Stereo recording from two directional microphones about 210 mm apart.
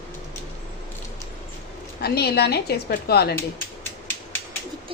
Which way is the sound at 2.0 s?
50° left (ahead or behind).